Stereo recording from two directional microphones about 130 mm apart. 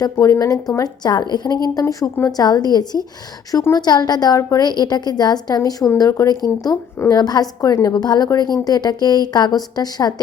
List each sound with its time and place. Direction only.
0.0 s a woman's voice: 25° left (ahead or behind)